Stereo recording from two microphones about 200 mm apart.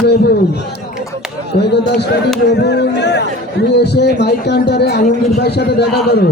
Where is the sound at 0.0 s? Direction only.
55° left (ahead or behind).